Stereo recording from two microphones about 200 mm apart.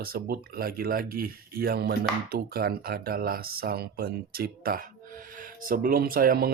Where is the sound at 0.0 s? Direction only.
50° right (ahead or behind).